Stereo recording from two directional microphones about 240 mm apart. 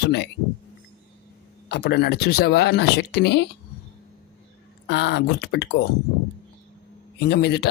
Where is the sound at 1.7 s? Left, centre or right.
Left.